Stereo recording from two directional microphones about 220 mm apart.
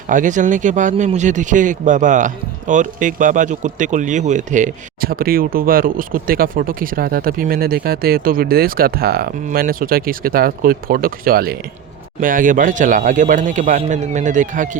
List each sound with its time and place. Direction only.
0.1 s a man's voice: 35° right (ahead or behind)